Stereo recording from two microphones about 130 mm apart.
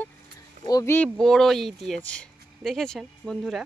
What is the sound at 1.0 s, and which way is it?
Speech, 5° left (ahead or behind).